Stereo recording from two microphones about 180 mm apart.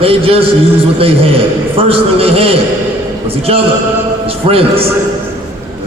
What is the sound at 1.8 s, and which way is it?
A man's voice, 30° right (ahead or behind).